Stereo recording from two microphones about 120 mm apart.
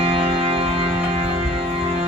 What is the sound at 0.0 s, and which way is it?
Music, 50° right (ahead or behind).